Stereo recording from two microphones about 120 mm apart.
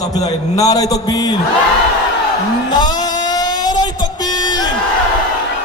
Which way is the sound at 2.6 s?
35° left (ahead or behind).